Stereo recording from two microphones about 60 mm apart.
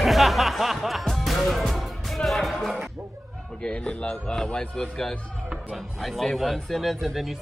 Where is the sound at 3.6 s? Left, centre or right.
Centre.